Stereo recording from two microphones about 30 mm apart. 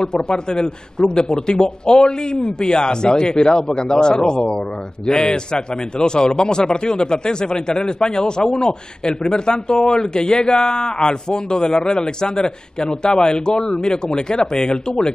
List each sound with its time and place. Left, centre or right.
0.0 s a man's voice: left